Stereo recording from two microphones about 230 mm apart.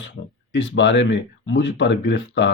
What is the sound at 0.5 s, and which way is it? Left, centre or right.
Speech, left.